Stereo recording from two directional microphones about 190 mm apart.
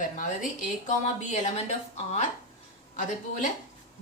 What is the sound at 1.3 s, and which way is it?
Speech, 35° left (ahead or behind).